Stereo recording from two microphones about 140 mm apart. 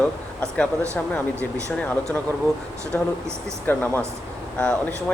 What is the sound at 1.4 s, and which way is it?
Speech, 20° right (ahead or behind).